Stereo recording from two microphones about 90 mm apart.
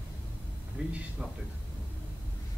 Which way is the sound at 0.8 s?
15° right (ahead or behind).